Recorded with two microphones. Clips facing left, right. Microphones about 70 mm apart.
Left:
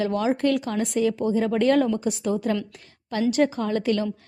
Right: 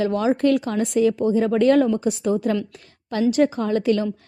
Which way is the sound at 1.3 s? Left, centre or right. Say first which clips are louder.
Right 2 dB; right.